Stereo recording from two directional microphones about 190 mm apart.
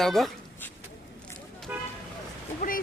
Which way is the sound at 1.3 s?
5° left (ahead or behind).